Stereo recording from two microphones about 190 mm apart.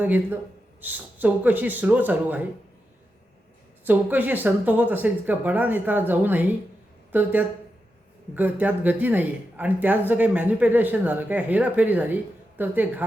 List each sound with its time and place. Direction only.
0.0 s speech: 10° right (ahead or behind)
3.8 s speech: 10° right (ahead or behind)